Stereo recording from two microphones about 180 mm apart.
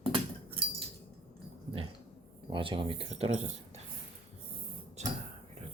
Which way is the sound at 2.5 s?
30° right (ahead or behind).